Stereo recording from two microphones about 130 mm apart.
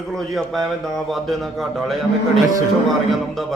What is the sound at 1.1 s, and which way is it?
A man's voice, centre (ahead or behind).